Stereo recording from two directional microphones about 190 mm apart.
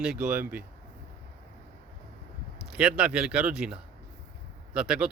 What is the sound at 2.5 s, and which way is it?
Speech, 5° right (ahead or behind).